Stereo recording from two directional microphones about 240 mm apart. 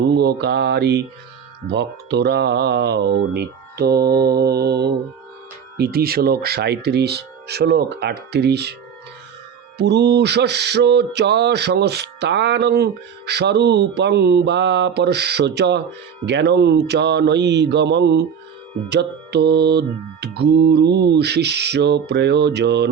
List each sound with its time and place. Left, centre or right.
0.0 s mantra: right
9.7 s mantra: right